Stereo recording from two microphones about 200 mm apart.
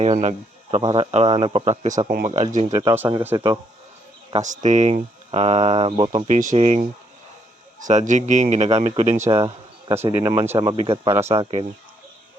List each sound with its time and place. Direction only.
0.0 s speech: 35° right (ahead or behind)
2.0 s speech: 45° right (ahead or behind)
2.8 s speech: 10° right (ahead or behind)
4.3 s speech: 35° right (ahead or behind)
9.9 s speech: 15° right (ahead or behind)
11.1 s speech: 15° right (ahead or behind)